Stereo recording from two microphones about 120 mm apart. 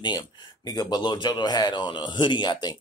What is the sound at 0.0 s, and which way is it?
Speech, 35° left (ahead or behind).